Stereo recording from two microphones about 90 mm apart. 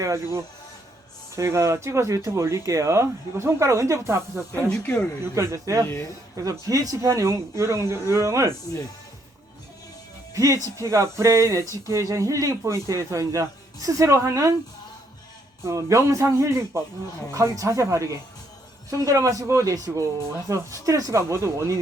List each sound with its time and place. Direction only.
0.0 s speech: 35° right (ahead or behind)
10.3 s speech: 40° right (ahead or behind)
15.6 s speech: 35° right (ahead or behind)